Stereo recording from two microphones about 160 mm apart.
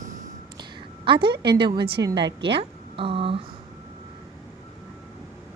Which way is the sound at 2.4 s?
35° right (ahead or behind).